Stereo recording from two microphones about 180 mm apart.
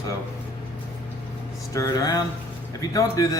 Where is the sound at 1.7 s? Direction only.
20° left (ahead or behind).